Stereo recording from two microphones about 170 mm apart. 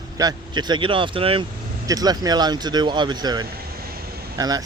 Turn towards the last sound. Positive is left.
turn(degrees=-20)  # may be behind; listen again after turning